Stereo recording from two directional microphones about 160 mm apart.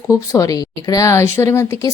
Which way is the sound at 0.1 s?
20° left (ahead or behind).